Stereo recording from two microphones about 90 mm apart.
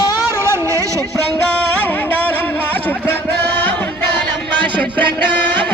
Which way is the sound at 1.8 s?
20° left (ahead or behind).